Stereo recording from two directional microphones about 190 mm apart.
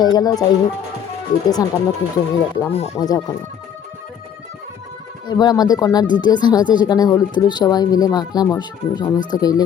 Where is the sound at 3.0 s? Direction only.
20° left (ahead or behind).